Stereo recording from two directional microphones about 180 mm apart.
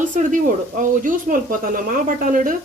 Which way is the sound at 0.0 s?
45° right (ahead or behind).